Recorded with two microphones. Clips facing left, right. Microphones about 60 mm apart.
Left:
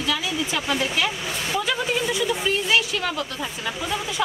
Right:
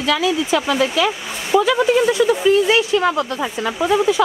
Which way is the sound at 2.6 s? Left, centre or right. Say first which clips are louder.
Right 7 dB; right.